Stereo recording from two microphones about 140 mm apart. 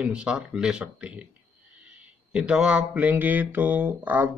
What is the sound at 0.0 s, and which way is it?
Speech, 10° right (ahead or behind).